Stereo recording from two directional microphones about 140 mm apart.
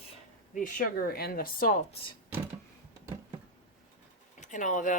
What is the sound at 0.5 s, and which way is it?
Speech, 80° left.